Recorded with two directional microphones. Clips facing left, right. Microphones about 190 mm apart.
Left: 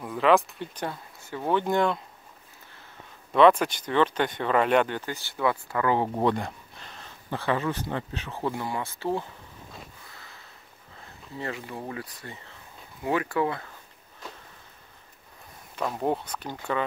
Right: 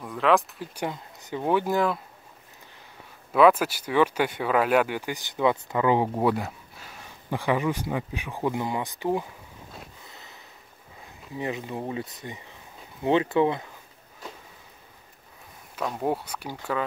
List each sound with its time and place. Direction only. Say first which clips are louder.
0.0 s speech: left 1 dB; centre (ahead or behind)
0.7 s speech: right 4 dB; 15° right (ahead or behind)
3.3 s speech: even; 5° right (ahead or behind)
6.1 s speech: right 1 dB; 5° right (ahead or behind)
10.0 s sniff: right 2 dB; 20° right (ahead or behind)
11.0 s speech: right 3 dB; 15° right (ahead or behind)
15.7 s speech: even; centre (ahead or behind)